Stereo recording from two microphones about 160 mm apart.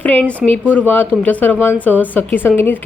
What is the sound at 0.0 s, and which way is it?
A woman's voice, 10° left (ahead or behind).